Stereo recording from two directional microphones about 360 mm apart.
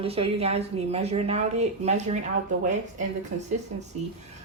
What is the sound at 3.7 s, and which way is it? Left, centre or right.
Speech, centre.